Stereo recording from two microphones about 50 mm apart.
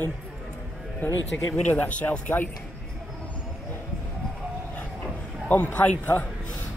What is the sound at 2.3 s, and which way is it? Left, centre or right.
Speech, left.